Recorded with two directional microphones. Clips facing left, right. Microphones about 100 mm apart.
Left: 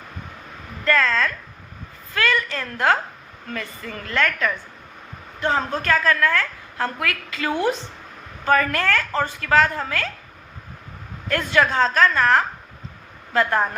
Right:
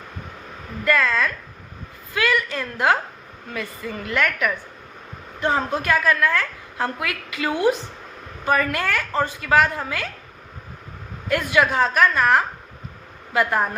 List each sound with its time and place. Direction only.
0.9 s a woman's voice: 15° right (ahead or behind)
11.3 s a woman's voice: 15° right (ahead or behind)